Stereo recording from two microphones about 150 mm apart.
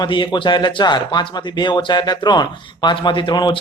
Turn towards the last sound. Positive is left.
turn(degrees=30)  # may be behind; listen again after turning